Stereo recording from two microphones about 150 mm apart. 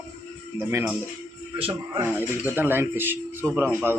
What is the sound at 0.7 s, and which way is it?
Speech, 15° right (ahead or behind).